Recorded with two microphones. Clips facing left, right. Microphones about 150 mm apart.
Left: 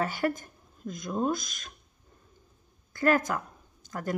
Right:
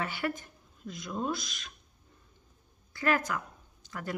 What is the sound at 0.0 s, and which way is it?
Speech, 40° left (ahead or behind).